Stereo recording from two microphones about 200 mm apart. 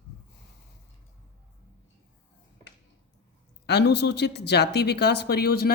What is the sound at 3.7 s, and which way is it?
Speech, 55° left (ahead or behind).